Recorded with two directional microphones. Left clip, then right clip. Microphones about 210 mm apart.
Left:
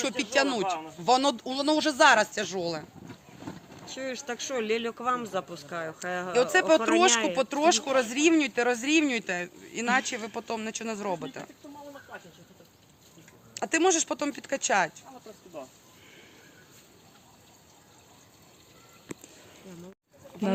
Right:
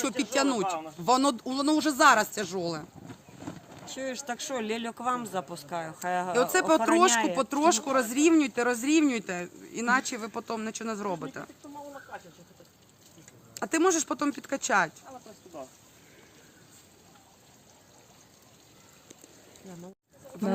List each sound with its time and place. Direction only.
0.2 s speech: 50° right (ahead or behind)
3.8 s speech: 55° right (ahead or behind)
13.5 s speech: 50° right (ahead or behind)